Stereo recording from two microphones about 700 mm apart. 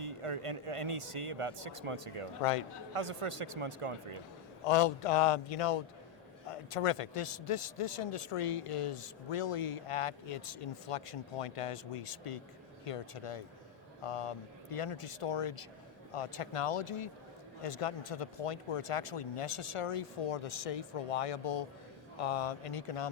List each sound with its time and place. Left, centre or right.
0.0 s speech: right
2.4 s a man's voice: left
2.9 s speech: right
4.6 s a man's voice: left